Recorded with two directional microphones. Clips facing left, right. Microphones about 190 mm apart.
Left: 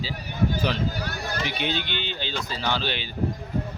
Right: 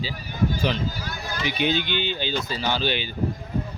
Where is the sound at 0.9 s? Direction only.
60° left (ahead or behind).